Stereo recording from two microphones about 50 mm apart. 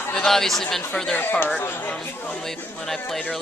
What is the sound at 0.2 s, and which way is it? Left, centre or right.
Speech, centre.